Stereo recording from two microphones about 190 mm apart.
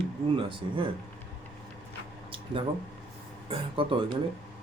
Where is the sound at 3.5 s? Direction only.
30° right (ahead or behind).